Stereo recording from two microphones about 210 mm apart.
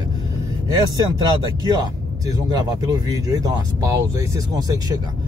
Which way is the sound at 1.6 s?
20° right (ahead or behind).